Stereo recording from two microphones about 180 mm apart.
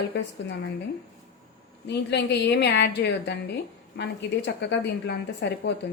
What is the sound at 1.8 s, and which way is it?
A woman's voice, 70° left (ahead or behind).